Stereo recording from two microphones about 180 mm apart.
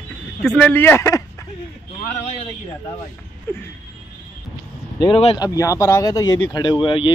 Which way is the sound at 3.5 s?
10° left (ahead or behind).